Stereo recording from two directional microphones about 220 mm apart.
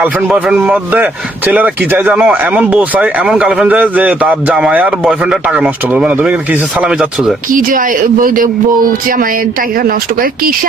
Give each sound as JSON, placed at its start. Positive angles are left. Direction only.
{"t": 0.0, "sound": "speech", "side_deg": -5}
{"t": 7.5, "sound": "speech", "side_deg": -40}